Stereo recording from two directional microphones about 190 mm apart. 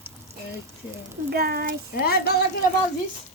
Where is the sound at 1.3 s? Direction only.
55° right (ahead or behind).